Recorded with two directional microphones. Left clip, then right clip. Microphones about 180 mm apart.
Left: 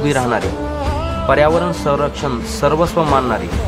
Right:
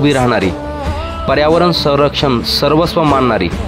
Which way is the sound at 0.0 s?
35° right (ahead or behind).